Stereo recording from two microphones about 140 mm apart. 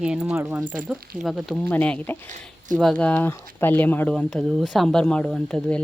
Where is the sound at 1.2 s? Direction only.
Centre (ahead or behind).